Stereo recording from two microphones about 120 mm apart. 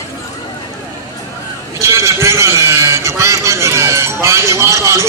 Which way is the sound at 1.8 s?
25° right (ahead or behind).